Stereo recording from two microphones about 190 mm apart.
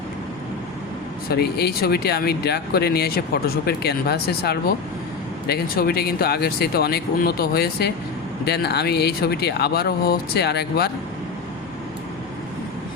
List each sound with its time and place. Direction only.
1.3 s speech: 60° left (ahead or behind)